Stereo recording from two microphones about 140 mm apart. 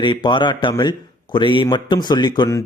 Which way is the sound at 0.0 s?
35° left (ahead or behind).